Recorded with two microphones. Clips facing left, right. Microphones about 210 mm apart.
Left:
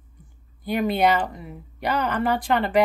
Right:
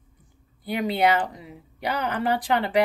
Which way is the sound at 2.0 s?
10° right (ahead or behind).